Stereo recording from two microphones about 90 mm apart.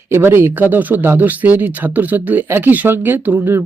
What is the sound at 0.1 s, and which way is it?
Speech, 25° right (ahead or behind).